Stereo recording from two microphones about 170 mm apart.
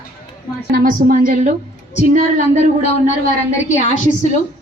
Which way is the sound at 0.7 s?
55° right (ahead or behind).